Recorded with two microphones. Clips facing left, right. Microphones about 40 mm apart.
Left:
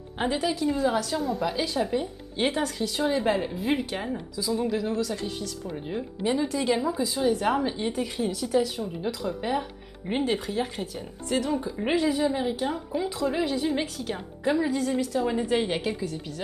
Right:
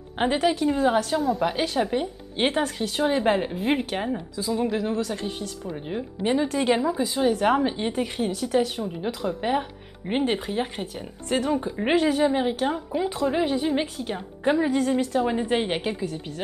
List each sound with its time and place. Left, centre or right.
0.2 s a woman's voice: right
5.7 s speech: centre
6.2 s a woman's voice: right
11.2 s a woman's voice: right
14.4 s a woman's voice: right